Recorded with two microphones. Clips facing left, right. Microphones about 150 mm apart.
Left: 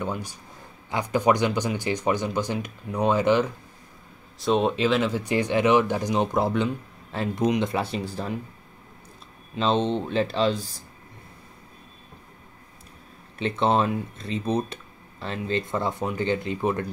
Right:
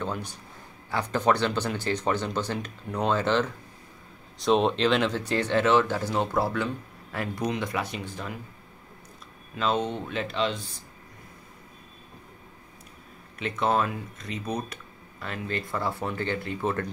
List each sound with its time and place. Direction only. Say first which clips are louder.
0.0 s speech: left 2 dB; 10° left (ahead or behind)
4.4 s speech: even; centre (ahead or behind); by 8.4 s 35° left (ahead or behind)
9.6 s speech: left 4 dB; 25° left (ahead or behind)
13.4 s speech: left 3 dB; 25° left (ahead or behind)